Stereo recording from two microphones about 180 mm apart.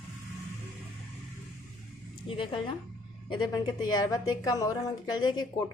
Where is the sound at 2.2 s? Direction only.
30° left (ahead or behind).